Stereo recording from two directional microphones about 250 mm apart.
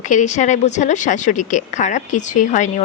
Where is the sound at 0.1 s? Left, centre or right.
Left.